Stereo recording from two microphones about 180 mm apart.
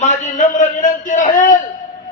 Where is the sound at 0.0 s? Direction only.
40° left (ahead or behind).